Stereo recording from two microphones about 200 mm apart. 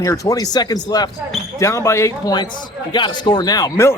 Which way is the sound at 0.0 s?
15° left (ahead or behind).